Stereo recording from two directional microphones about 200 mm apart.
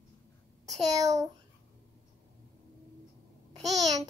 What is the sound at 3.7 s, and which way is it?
Child singing, 15° right (ahead or behind).